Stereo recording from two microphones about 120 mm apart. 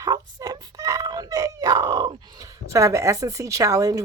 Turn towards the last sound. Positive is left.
turn(degrees=-30)  # may be behind; listen again after turning